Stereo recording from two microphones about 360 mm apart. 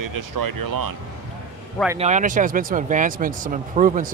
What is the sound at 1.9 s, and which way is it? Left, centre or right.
Speech, centre.